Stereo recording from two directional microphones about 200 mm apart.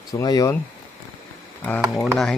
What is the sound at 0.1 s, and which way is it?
Speech, 20° left (ahead or behind).